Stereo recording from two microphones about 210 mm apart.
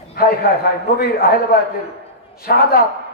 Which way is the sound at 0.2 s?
45° left (ahead or behind).